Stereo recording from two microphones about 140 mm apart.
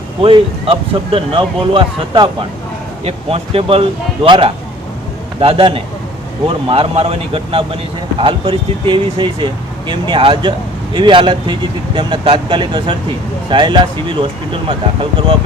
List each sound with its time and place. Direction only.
0.2 s speech: 40° right (ahead or behind)
3.0 s speech: 45° right (ahead or behind)